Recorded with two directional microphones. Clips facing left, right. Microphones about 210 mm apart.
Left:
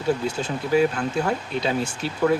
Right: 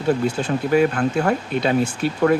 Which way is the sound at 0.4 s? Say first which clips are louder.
Right 3 dB; 55° right (ahead or behind).